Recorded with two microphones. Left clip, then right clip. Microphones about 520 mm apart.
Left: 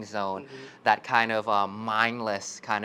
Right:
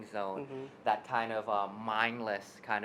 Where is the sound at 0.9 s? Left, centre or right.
Left.